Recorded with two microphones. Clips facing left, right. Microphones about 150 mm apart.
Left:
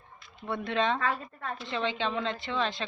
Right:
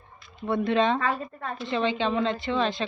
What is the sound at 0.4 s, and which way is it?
Speech, 25° right (ahead or behind).